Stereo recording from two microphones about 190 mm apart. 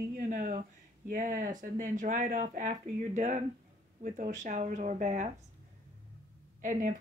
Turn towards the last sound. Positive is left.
turn(degrees=-40)  # may be behind; listen again after turning